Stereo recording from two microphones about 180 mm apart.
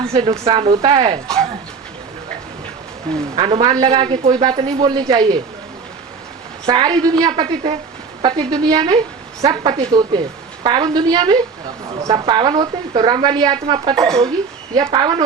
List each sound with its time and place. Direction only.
0.1 s a man's voice: 30° right (ahead or behind)
3.3 s a man's voice: 30° right (ahead or behind)
6.7 s a man's voice: 20° right (ahead or behind)
13.9 s speech: 5° left (ahead or behind)
14.8 s a man's voice: 25° right (ahead or behind)